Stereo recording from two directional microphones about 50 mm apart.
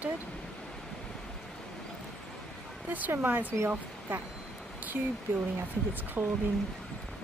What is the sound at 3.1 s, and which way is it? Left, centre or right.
Speech, right.